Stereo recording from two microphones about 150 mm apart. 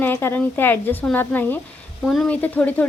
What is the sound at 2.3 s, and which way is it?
Speech, 10° left (ahead or behind).